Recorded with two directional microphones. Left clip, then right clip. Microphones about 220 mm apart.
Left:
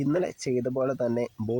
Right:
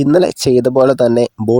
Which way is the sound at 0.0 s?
45° right (ahead or behind).